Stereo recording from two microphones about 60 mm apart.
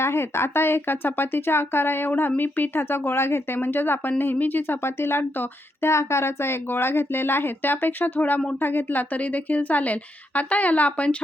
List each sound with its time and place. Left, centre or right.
0.0 s a woman's voice: left